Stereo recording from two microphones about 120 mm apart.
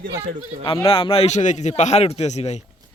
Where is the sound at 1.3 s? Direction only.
80° left.